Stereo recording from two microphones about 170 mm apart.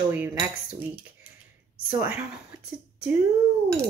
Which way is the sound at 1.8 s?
15° right (ahead or behind).